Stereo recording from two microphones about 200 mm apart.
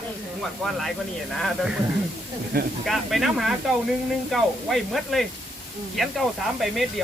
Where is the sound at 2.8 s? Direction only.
Centre (ahead or behind).